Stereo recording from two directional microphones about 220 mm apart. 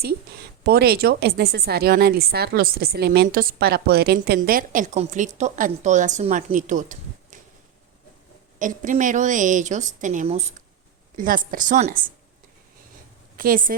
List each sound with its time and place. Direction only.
0.6 s a woman's voice: 45° right (ahead or behind)
8.5 s a woman's voice: 35° right (ahead or behind)
13.3 s a woman's voice: 40° right (ahead or behind)